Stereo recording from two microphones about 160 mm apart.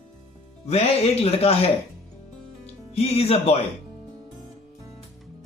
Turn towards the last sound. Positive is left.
turn(degrees=40)  # may be behind; listen again after turning